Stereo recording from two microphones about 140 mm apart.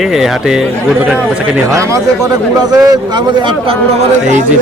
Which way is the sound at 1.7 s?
20° right (ahead or behind).